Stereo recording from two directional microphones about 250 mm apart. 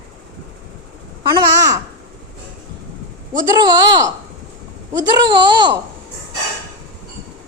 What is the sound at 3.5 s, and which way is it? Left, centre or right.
Speech, centre.